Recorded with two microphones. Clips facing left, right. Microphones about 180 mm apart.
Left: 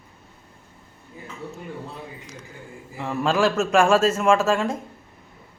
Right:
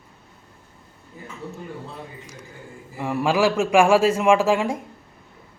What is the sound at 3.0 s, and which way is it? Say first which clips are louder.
A man's voice: right 1 dB; 15° right (ahead or behind).